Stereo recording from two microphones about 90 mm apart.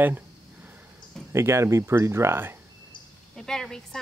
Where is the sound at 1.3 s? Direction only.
30° right (ahead or behind).